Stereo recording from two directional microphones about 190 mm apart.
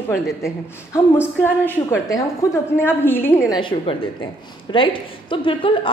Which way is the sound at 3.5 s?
25° left (ahead or behind).